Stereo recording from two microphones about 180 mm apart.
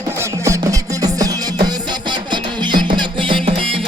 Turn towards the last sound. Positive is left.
turn(degrees=-30)  # may be behind; listen again after turning